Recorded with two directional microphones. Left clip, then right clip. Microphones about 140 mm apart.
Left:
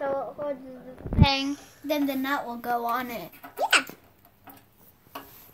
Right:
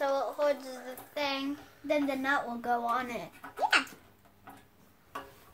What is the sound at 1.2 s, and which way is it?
Speech, 35° left (ahead or behind).